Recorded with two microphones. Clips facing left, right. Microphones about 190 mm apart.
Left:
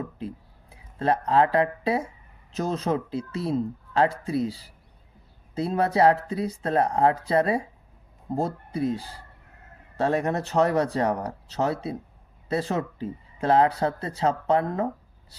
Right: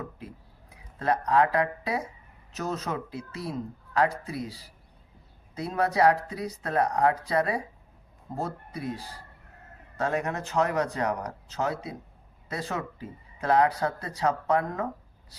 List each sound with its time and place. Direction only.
0.7 s speech: 30° left (ahead or behind)